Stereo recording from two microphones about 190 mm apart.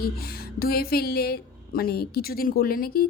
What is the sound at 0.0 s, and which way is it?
A woman's voice, 55° left (ahead or behind).